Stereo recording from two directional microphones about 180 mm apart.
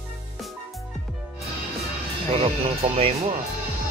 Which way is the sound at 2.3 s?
30° right (ahead or behind).